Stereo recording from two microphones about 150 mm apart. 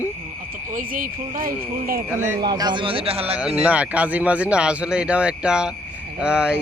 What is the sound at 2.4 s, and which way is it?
Speech, 30° right (ahead or behind).